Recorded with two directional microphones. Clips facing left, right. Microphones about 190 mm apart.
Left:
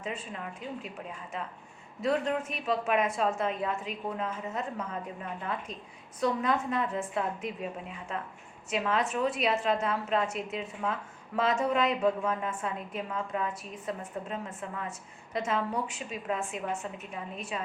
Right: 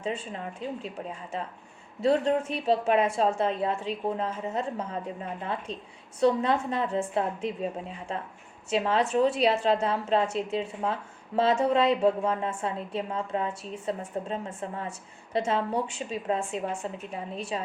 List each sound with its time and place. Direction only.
0.0 s a woman's voice: 30° right (ahead or behind)